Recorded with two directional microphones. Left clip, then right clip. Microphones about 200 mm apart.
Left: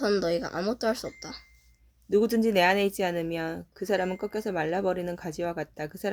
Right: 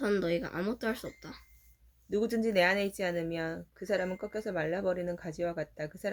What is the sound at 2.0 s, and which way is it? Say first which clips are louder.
Speech: left 7 dB; 40° left (ahead or behind).